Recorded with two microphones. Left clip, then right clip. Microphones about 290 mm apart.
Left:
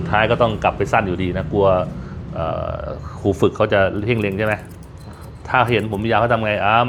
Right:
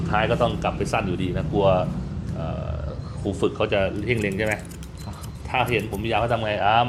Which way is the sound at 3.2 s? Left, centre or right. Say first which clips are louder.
Left 9 dB; left.